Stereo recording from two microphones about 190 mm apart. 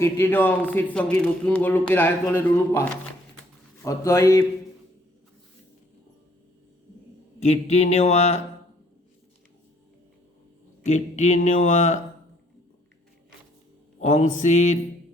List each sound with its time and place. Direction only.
0.0 s speech: 10° left (ahead or behind)
7.3 s speech: 35° left (ahead or behind)
10.8 s speech: 40° left (ahead or behind)
14.0 s speech: 40° left (ahead or behind)